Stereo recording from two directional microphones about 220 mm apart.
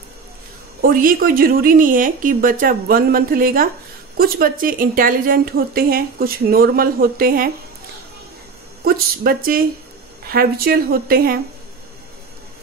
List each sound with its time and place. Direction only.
0.7 s a woman's voice: 40° right (ahead or behind)
8.8 s a woman's voice: 45° right (ahead or behind)